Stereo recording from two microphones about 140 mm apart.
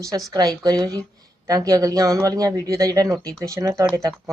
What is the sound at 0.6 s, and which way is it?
Speech, 25° right (ahead or behind).